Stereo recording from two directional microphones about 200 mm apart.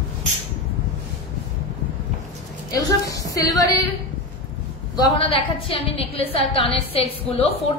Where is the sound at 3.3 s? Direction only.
15° left (ahead or behind).